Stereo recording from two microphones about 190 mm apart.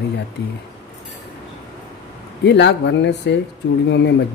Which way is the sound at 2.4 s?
65° left (ahead or behind).